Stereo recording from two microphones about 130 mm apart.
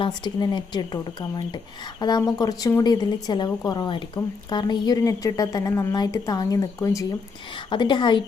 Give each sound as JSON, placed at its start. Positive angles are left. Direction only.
{"t": 0.0, "sound": "a woman's voice", "side_deg": 35}
{"t": 7.7, "sound": "a woman's voice", "side_deg": 35}